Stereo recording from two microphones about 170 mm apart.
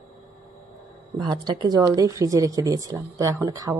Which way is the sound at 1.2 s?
25° right (ahead or behind).